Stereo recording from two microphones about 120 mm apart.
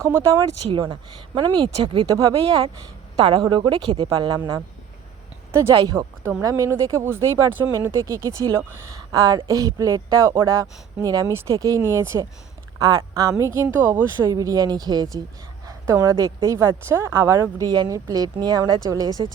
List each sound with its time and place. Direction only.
0.0 s speech: 25° right (ahead or behind)
0.7 s speech: 45° right (ahead or behind)
2.0 s speech: 30° right (ahead or behind)
3.2 s speech: 40° right (ahead or behind)
5.5 s speech: 25° right (ahead or behind)
14.3 s speech: 30° right (ahead or behind)